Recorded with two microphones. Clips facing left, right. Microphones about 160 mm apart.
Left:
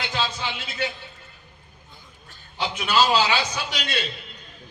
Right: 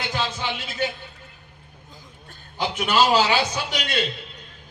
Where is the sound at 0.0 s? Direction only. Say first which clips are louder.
Right 1 dB; 45° right (ahead or behind).